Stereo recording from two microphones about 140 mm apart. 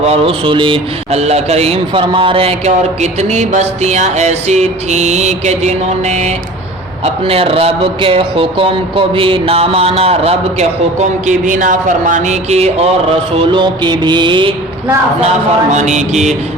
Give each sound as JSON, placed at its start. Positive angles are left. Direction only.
{"t": 0.0, "sound": "speech", "side_deg": -45}
{"t": 1.2, "sound": "speech", "side_deg": -50}
{"t": 7.0, "sound": "speech", "side_deg": -45}
{"t": 11.3, "sound": "speech", "side_deg": -65}
{"t": 15.7, "sound": "mantra", "side_deg": -55}